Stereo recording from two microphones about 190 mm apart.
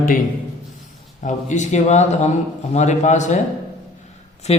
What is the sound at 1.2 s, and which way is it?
Speech, 40° left (ahead or behind).